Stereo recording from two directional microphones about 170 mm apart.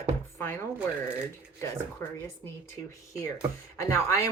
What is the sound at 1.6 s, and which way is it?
Speech, 20° left (ahead or behind).